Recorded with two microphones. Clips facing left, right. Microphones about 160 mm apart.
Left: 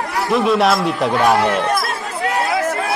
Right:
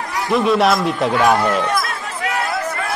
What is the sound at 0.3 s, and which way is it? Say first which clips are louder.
Speech: even; centre (ahead or behind).